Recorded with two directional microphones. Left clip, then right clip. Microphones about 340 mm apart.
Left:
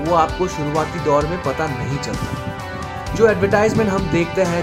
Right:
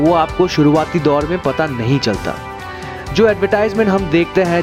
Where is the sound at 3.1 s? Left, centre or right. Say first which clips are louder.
Right 2 dB; right.